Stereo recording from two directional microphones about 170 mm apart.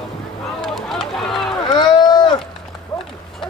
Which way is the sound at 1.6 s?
25° left (ahead or behind).